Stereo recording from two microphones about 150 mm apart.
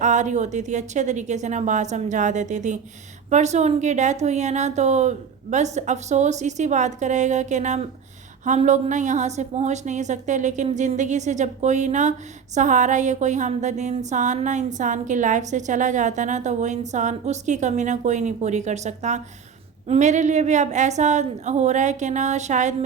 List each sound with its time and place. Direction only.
0.0 s a woman's voice: 55° right (ahead or behind)